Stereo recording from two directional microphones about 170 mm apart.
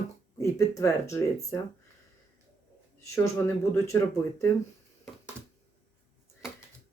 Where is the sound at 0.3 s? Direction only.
20° left (ahead or behind).